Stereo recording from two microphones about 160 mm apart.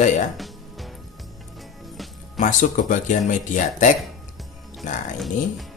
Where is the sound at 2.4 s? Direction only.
55° left (ahead or behind).